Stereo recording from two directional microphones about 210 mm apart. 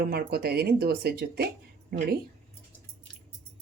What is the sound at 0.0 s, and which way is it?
Speech, 45° right (ahead or behind).